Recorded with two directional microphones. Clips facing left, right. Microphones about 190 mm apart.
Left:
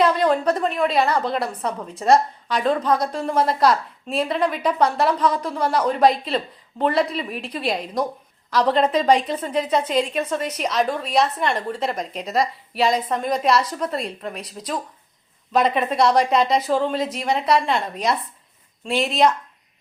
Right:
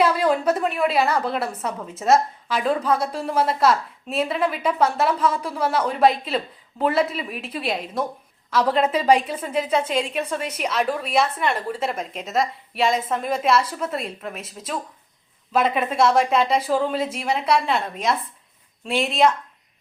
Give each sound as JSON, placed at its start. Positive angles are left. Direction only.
{"t": 0.0, "sound": "a woman's voice", "side_deg": -10}
{"t": 15.5, "sound": "a woman's voice", "side_deg": -5}